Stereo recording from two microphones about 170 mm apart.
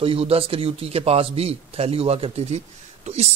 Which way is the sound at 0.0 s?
35° right (ahead or behind).